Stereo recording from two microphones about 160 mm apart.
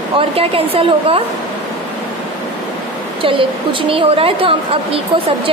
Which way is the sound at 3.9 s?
35° right (ahead or behind).